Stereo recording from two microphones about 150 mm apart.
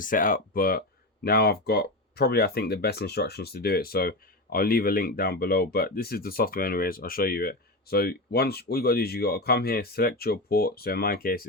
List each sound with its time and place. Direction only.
0.0 s speech: 65° left (ahead or behind)